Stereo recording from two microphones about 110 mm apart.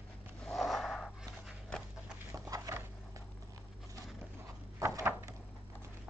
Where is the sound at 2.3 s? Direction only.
30° right (ahead or behind).